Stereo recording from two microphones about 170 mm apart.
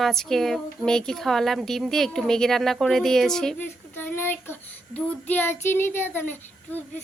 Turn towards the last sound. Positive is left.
turn(degrees=10)  # may be behind; listen again after turning